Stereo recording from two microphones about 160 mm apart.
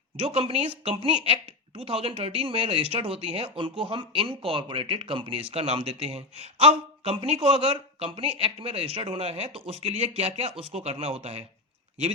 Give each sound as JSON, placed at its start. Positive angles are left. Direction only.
{"t": 0.2, "sound": "speech", "side_deg": -35}